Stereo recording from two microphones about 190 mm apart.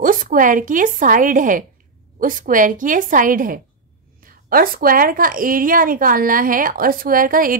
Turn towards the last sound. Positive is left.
turn(degrees=-45)  # may be behind; listen again after turning